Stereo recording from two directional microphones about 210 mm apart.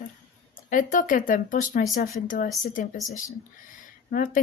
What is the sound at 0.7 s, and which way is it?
Speech, 40° left (ahead or behind).